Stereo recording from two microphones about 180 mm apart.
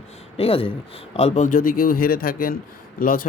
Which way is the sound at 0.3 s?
30° left (ahead or behind).